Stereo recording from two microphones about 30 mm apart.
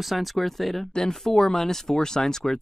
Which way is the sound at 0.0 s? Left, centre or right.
Centre.